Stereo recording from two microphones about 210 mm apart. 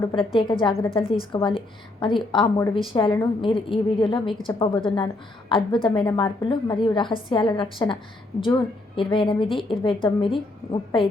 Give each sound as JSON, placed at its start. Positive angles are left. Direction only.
{"t": 0.0, "sound": "a woman's voice", "side_deg": 20}